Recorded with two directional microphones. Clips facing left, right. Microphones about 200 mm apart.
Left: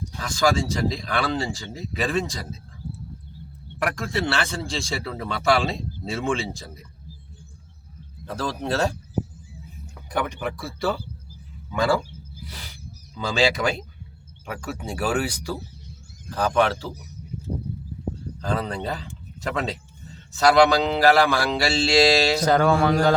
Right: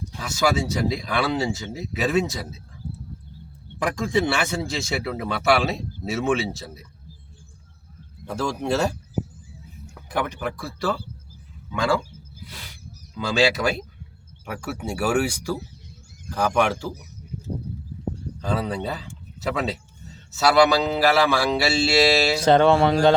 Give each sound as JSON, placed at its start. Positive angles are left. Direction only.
{"t": 0.2, "sound": "a man's voice", "side_deg": -10}
{"t": 4.1, "sound": "a man's voice", "side_deg": -15}
{"t": 8.3, "sound": "a man's voice", "side_deg": -10}
{"t": 10.1, "sound": "speech", "side_deg": -5}
{"t": 13.5, "sound": "a man's voice", "side_deg": -5}
{"t": 18.3, "sound": "a man's voice", "side_deg": -5}
{"t": 22.4, "sound": "mantra", "side_deg": -25}